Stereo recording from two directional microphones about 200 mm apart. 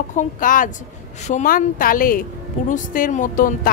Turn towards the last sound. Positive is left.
turn(degrees=40)  # may be behind; listen again after turning